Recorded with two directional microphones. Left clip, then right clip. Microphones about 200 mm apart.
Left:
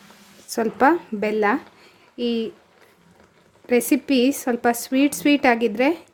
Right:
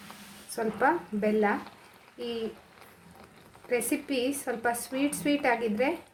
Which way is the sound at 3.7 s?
50° left (ahead or behind).